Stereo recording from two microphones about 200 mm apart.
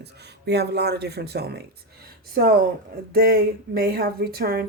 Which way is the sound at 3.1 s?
50° right (ahead or behind).